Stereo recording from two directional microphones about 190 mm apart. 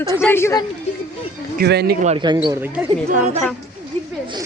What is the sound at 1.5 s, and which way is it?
Speech, 60° right (ahead or behind).